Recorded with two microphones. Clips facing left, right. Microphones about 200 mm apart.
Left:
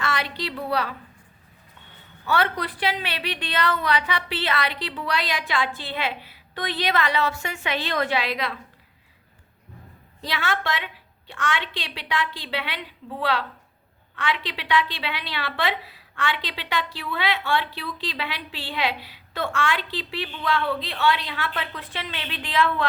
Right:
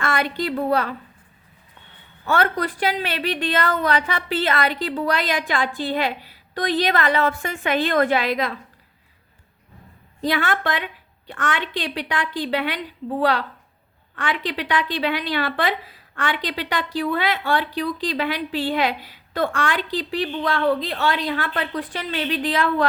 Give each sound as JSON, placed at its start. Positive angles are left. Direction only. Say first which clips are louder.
{"t": 0.0, "sound": "a woman's voice", "louder": "right 5 dB", "side_deg": -50}
{"t": 2.2, "sound": "a woman's voice", "louder": "right 3 dB", "side_deg": -45}
{"t": 10.2, "sound": "a woman's voice", "louder": "right 6 dB", "side_deg": -45}